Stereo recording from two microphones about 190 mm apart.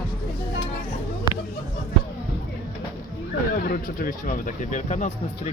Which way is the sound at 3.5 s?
50° left (ahead or behind).